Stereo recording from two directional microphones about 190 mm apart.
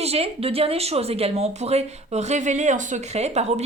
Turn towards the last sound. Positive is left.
turn(degrees=-35)  # may be behind; listen again after turning